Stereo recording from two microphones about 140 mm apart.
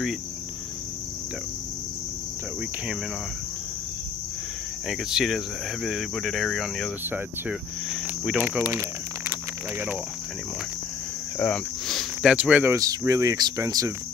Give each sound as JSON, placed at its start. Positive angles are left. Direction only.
{"t": 4.8, "sound": "speech", "side_deg": 0}
{"t": 11.3, "sound": "speech", "side_deg": 10}
{"t": 12.7, "sound": "speech", "side_deg": -25}